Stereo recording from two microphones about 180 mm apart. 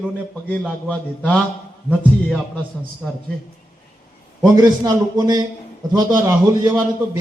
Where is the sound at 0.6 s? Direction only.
5° left (ahead or behind).